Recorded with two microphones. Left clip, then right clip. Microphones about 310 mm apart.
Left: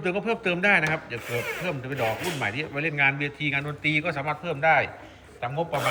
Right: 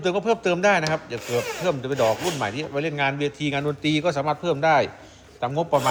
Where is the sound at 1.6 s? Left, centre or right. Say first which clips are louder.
Right 6 dB; right.